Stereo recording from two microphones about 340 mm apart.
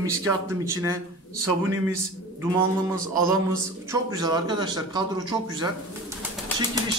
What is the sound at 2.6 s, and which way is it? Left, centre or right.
Speech, right.